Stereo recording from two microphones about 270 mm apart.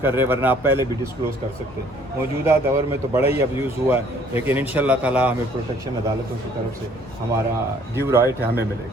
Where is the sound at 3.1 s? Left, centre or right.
Centre.